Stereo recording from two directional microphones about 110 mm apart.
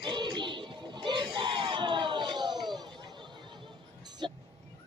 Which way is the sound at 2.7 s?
40° right (ahead or behind).